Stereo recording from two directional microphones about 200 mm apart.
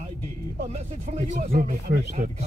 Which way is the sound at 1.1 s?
40° right (ahead or behind).